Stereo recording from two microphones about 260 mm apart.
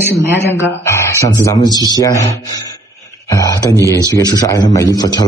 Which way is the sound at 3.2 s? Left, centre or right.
Centre.